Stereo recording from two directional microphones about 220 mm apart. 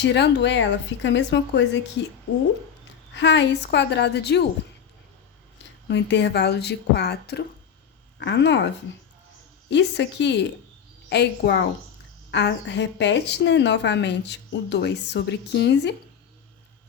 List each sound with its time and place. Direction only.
0.0 s speech: 50° left (ahead or behind)
3.2 s speech: 55° left (ahead or behind)
5.9 s speech: 50° left (ahead or behind)
9.6 s speech: 55° left (ahead or behind)